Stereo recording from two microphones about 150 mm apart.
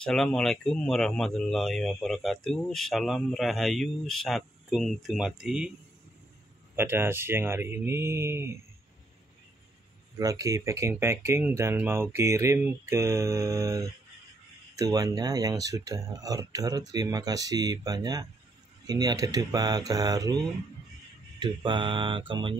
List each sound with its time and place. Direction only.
0.0 s speech: 5° left (ahead or behind)
6.7 s speech: 15° right (ahead or behind)
10.1 s speech: 20° right (ahead or behind)
21.4 s mantra: 30° right (ahead or behind)